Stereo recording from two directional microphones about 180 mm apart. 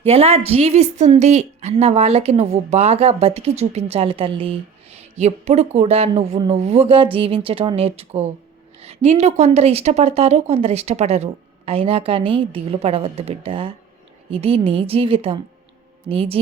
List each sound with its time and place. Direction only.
0.0 s speech: 35° right (ahead or behind)